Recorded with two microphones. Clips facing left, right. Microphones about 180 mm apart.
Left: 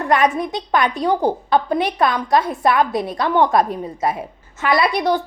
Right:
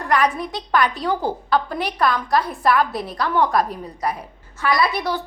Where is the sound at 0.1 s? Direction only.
20° left (ahead or behind).